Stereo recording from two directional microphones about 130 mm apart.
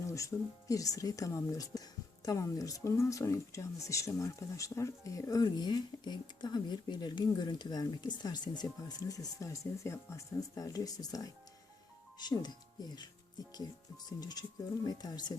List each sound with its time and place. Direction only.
0.1 s speech: 25° left (ahead or behind)
14.2 s speech: 30° left (ahead or behind)